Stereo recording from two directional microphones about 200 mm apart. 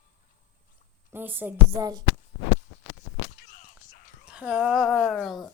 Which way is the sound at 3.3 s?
40° left (ahead or behind).